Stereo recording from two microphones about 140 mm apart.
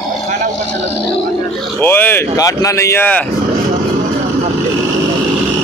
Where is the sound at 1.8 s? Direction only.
15° left (ahead or behind).